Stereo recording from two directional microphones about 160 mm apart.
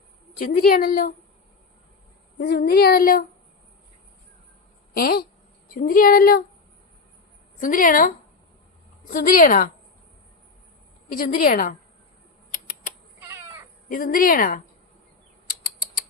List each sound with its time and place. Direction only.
0.3 s speech: 70° left (ahead or behind)
2.4 s speech: 70° left (ahead or behind)
4.9 s a woman's voice: 70° left (ahead or behind)
7.6 s a woman's voice: 55° left (ahead or behind)
11.1 s a woman's voice: 65° left (ahead or behind)
12.5 s typewriter: 55° left (ahead or behind)
13.2 s crow: 15° right (ahead or behind)
13.8 s a woman's voice: 60° left (ahead or behind)
15.4 s bird flight: 65° left (ahead or behind)